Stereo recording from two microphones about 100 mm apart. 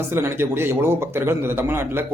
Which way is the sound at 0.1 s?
25° right (ahead or behind).